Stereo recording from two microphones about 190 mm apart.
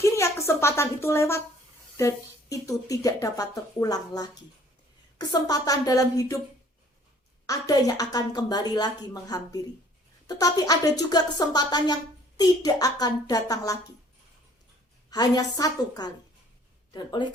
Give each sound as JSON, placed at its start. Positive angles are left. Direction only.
{"t": 0.0, "sound": "a woman's voice", "side_deg": 15}
{"t": 7.4, "sound": "a woman's voice", "side_deg": 20}
{"t": 15.1, "sound": "a woman's voice", "side_deg": 20}